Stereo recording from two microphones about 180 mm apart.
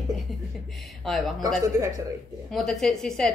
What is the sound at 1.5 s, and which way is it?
Speech, 20° right (ahead or behind).